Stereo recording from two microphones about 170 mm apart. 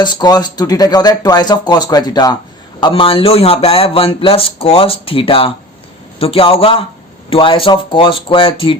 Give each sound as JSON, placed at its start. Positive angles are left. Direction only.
{"t": 0.0, "sound": "speech", "side_deg": 25}